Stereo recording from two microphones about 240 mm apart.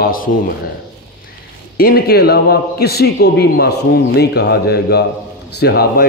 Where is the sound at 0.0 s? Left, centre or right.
Left.